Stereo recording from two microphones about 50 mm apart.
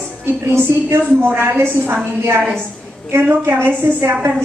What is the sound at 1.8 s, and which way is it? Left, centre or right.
Speech, right.